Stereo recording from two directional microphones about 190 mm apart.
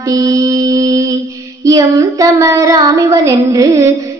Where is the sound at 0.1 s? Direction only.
15° right (ahead or behind).